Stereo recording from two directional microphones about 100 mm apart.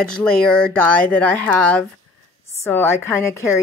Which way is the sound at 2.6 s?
25° left (ahead or behind).